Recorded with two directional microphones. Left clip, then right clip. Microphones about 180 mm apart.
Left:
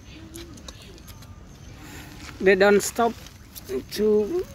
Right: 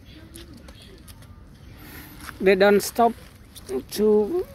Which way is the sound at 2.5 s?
10° right (ahead or behind).